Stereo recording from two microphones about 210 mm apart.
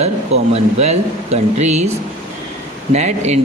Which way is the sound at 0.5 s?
30° right (ahead or behind).